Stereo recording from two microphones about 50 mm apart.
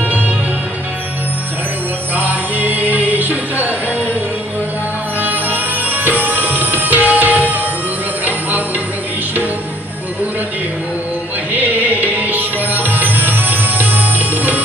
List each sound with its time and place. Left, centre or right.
2.1 s music: right
5.2 s music: right
11.5 s music: right